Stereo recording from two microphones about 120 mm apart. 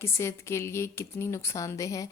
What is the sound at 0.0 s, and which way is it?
A woman's voice, 20° left (ahead or behind).